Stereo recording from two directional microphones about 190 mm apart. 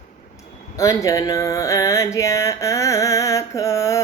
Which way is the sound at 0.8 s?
15° left (ahead or behind).